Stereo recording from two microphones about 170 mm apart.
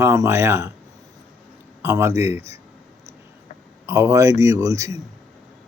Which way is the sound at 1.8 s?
15° right (ahead or behind).